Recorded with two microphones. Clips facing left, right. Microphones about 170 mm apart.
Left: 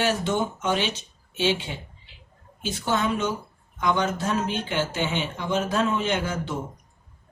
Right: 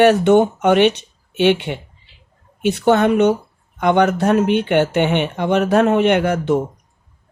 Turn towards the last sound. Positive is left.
turn(degrees=-65)  # may be behind; listen again after turning